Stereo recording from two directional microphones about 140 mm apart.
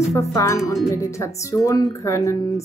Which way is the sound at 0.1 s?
20° left (ahead or behind).